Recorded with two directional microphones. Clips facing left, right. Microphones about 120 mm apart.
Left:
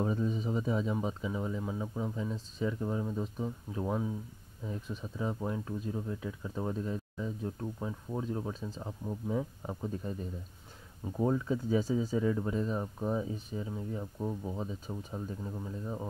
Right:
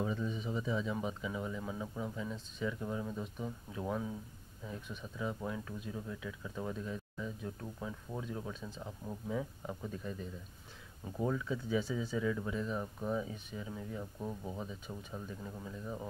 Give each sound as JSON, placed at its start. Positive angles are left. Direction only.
{"t": 0.0, "sound": "speech", "side_deg": 40}
{"t": 1.0, "sound": "speech", "side_deg": 25}
{"t": 11.1, "sound": "speech", "side_deg": 35}